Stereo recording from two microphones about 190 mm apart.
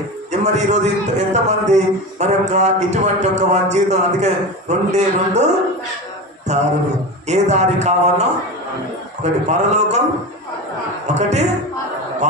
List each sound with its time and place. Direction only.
0.3 s a man's voice: 35° right (ahead or behind)
6.5 s a man's voice: 35° right (ahead or behind)
11.1 s a man's voice: 35° right (ahead or behind)